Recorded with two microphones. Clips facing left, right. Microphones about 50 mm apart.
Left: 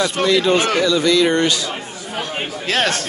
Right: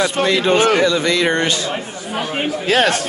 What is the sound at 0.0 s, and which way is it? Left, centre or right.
Speech, centre.